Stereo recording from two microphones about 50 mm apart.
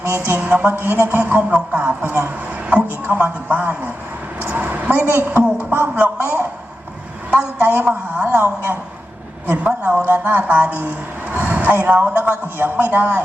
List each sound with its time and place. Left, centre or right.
0.0 s a woman's voice: right
0.3 s speech: right
0.7 s speech: right
1.4 s speech: right
2.0 s speech: right
4.4 s a sound: right
5.2 s a woman's voice: right
9.6 s a woman's voice: right
10.0 s speech: right
11.3 s a sound: right
12.2 s speech: right